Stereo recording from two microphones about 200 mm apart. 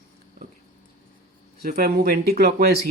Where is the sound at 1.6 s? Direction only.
50° right (ahead or behind).